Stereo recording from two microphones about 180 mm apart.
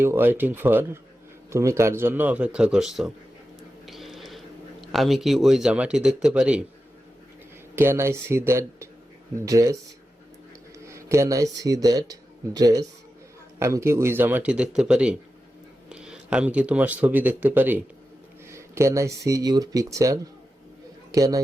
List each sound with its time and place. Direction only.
0.0 s speech: 10° right (ahead or behind)
7.8 s speech: 15° right (ahead or behind)
10.8 s a man's voice: 15° right (ahead or behind)